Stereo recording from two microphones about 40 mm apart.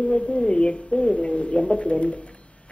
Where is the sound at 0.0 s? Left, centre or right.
Left.